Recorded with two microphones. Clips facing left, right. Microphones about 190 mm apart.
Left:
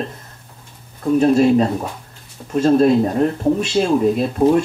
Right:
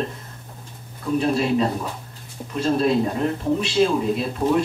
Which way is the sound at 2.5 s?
45° left (ahead or behind).